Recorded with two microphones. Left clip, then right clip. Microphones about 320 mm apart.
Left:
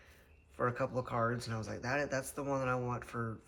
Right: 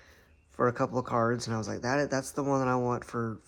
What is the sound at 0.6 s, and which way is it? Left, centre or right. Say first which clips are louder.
Speech: right 7 dB; centre.